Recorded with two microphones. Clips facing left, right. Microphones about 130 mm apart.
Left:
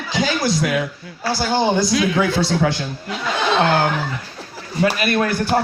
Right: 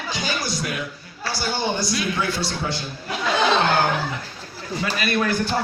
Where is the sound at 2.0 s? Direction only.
90° left.